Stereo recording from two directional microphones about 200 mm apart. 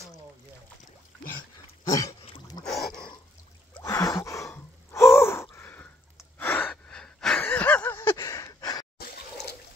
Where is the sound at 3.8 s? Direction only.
15° left (ahead or behind).